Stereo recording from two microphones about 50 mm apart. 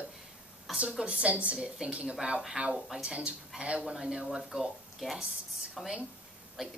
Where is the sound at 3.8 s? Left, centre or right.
Centre.